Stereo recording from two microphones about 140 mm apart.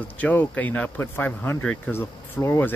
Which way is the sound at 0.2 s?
10° left (ahead or behind).